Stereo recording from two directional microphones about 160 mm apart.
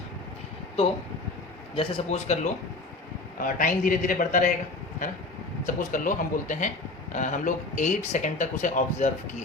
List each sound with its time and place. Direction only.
1.7 s speech: 40° left (ahead or behind)
3.3 s a man's voice: 60° left (ahead or behind)
5.6 s speech: 55° left (ahead or behind)